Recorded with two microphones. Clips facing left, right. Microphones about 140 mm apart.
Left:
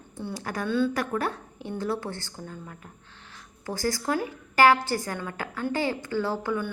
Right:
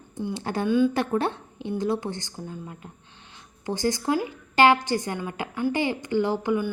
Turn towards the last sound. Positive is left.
turn(degrees=-15)  # may be behind; listen again after turning